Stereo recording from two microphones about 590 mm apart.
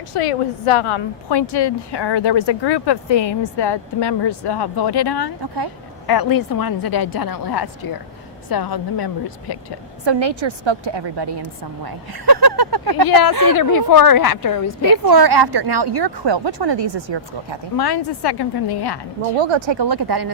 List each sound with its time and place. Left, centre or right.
0.1 s a woman's voice: left
10.1 s a woman's voice: right
13.1 s a woman's voice: left
14.8 s a woman's voice: right
17.7 s a woman's voice: left
19.4 s a woman's voice: right